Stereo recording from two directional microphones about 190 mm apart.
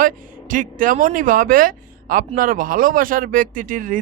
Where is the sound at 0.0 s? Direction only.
45° right (ahead or behind).